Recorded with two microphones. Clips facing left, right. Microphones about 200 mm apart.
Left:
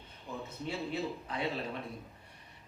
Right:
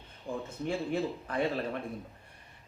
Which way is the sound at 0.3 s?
50° right (ahead or behind).